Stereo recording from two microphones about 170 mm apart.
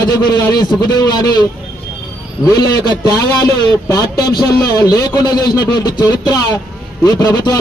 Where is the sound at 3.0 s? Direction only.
25° left (ahead or behind).